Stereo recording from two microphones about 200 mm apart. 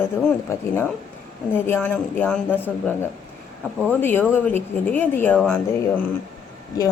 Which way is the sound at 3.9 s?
10° left (ahead or behind).